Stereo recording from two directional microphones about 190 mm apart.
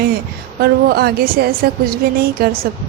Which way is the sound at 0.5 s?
55° right (ahead or behind).